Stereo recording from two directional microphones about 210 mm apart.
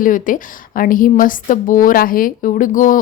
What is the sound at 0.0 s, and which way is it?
Speech, 40° left (ahead or behind).